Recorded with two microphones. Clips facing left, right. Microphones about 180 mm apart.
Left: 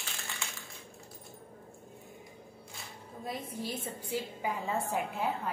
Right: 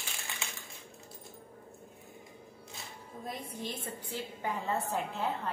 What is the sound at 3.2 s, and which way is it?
A woman's voice, 10° left (ahead or behind).